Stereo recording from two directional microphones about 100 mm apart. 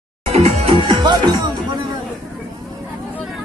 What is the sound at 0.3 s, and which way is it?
Music, 90° right.